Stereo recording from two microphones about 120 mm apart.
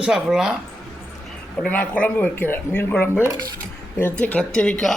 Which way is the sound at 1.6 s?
10° left (ahead or behind).